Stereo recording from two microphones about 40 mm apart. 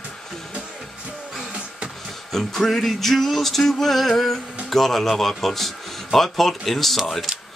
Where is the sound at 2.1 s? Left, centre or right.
Centre.